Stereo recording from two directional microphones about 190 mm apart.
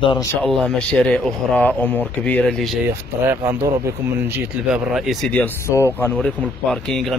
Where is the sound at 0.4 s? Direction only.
5° left (ahead or behind).